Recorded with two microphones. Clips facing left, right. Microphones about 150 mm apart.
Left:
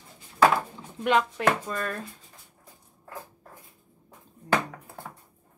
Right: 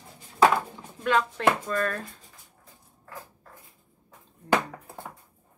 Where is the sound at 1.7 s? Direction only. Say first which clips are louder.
Right 4 dB; 10° left (ahead or behind).